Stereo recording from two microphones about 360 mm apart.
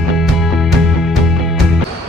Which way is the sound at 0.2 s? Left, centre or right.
Centre.